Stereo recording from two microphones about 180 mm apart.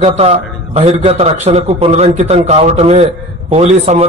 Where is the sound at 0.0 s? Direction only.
35° right (ahead or behind).